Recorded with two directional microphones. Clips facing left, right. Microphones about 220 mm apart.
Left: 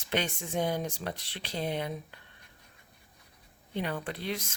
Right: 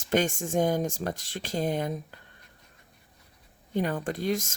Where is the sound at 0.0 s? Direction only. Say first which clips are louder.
Right 6 dB; 45° right (ahead or behind).